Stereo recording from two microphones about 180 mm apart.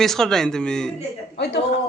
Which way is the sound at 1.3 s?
70° left (ahead or behind).